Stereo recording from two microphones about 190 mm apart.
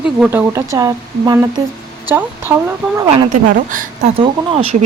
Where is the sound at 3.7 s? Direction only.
45° right (ahead or behind).